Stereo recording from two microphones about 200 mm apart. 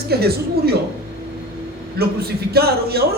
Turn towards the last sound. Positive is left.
turn(degrees=-50)  # may be behind; listen again after turning